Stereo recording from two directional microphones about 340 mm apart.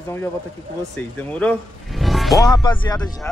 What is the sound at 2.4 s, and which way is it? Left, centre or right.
Speech, centre.